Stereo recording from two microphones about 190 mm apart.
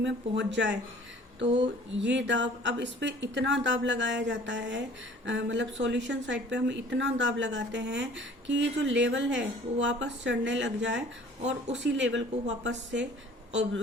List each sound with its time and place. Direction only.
0.0 s speech: 70° right (ahead or behind)
1.9 s speech: 70° right (ahead or behind)